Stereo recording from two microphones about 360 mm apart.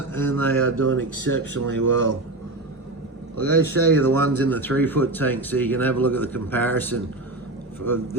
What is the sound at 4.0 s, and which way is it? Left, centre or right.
Speech, centre.